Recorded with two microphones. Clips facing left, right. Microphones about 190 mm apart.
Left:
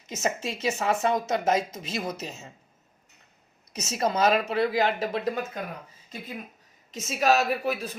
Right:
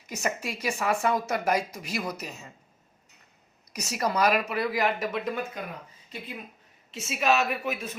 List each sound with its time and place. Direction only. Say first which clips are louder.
0.1 s speech: left 2 dB; 25° left (ahead or behind)
3.7 s speech: left 2 dB; 25° left (ahead or behind); by 5.6 s 40° left (ahead or behind)
6.9 s a woman's voice: left 2 dB; 40° left (ahead or behind)